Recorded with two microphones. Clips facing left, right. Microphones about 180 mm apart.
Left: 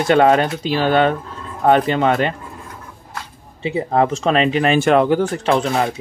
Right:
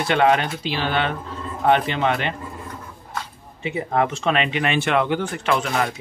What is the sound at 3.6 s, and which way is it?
Speech, 30° left (ahead or behind).